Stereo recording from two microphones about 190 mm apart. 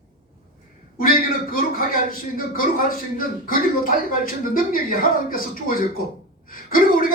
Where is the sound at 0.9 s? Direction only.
50° left (ahead or behind).